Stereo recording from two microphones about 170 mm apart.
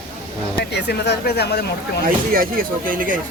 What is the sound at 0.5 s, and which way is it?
Speech, 75° left (ahead or behind).